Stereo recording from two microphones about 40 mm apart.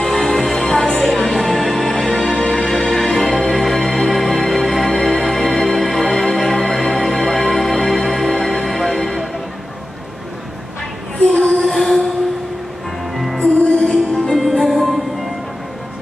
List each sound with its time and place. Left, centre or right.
0.0 s music: centre
2.7 s music: centre
11.3 s music: centre
11.6 s a sound: centre
13.1 s music: centre
14.4 s music: centre